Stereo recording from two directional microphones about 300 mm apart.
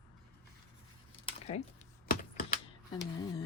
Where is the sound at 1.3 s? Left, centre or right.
Left.